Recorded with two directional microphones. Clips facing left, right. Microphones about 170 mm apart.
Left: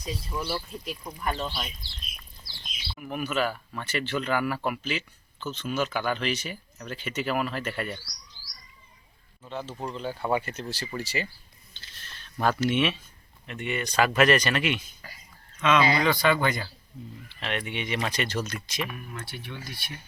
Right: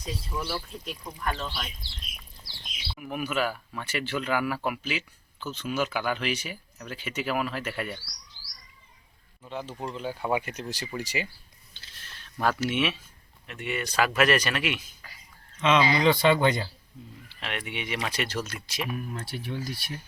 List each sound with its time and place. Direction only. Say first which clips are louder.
0.0 s speech: left 1 dB; 5° left (ahead or behind)
1.3 s speech: left 2 dB; 20° left (ahead or behind)
2.9 s speech: left 1 dB; 5° right (ahead or behind)
9.5 s speech: even; 10° right (ahead or behind)
11.7 s a sound: left 1 dB; 10° right (ahead or behind)
13.5 s speech: left 1 dB; 5° right (ahead or behind)
15.6 s speech: right 1 dB; 25° right (ahead or behind)
17.2 s speech: left 3 dB; 5° right (ahead or behind)
18.9 s speech: right 5 dB; 35° right (ahead or behind)